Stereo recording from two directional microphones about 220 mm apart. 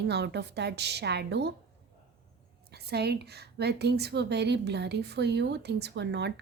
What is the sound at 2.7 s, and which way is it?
Speech, 45° right (ahead or behind).